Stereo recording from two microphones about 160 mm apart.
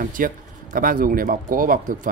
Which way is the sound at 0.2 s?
60° right (ahead or behind).